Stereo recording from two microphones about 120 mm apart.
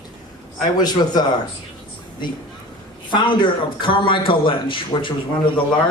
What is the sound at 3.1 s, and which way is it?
A man's voice, 40° left (ahead or behind).